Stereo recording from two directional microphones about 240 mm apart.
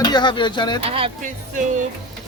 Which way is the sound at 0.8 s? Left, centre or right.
Right.